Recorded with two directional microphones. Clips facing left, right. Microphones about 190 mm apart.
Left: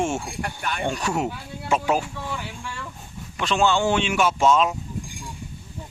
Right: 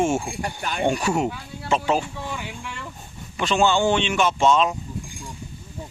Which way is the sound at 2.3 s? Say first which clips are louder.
Even; 15° right (ahead or behind).